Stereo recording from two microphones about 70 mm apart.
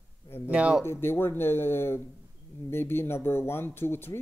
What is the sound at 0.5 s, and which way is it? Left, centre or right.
Speech, centre.